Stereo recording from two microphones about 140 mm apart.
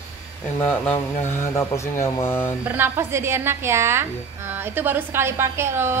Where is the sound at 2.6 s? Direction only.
15° right (ahead or behind).